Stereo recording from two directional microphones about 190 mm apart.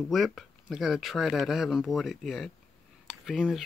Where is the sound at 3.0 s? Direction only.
Centre (ahead or behind).